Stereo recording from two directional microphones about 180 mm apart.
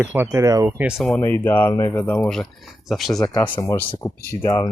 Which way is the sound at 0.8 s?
5° right (ahead or behind).